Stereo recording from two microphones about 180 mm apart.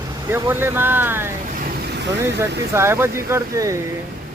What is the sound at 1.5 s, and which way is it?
Vehicle, 60° right (ahead or behind).